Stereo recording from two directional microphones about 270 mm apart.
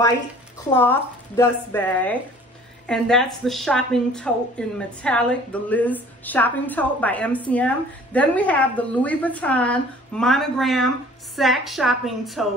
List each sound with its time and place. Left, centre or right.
0.7 s a woman's voice: centre